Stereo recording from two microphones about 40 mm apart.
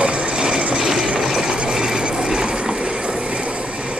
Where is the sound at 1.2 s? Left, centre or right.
Centre.